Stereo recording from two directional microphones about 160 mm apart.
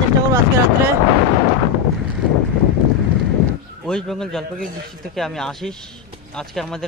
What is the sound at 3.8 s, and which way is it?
Speech, 5° left (ahead or behind).